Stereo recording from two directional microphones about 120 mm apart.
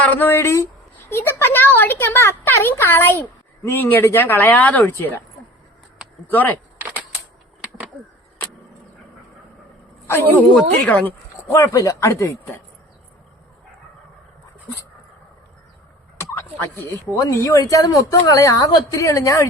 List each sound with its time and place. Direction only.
0.0 s speech: 15° left (ahead or behind)
6.2 s speech: 15° left (ahead or behind)
10.3 s speech: 10° left (ahead or behind)
11.5 s speech: 25° left (ahead or behind)
17.2 s speech: 25° left (ahead or behind)